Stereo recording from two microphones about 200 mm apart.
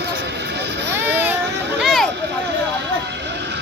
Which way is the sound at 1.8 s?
Centre (ahead or behind).